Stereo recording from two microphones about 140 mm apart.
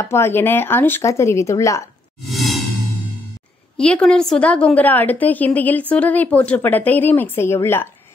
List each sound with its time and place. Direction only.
0.0 s speech: 20° left (ahead or behind)
2.2 s whoosh: centre (ahead or behind)
3.7 s a woman's voice: 5° left (ahead or behind)